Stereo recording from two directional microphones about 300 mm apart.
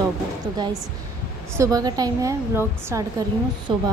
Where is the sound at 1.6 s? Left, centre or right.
Centre.